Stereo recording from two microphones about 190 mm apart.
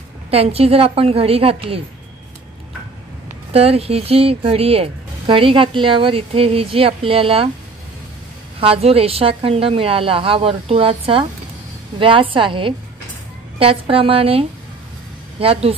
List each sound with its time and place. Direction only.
0.3 s a woman's voice: 30° right (ahead or behind)
3.5 s speech: 30° right (ahead or behind)
8.5 s a woman's voice: 30° right (ahead or behind)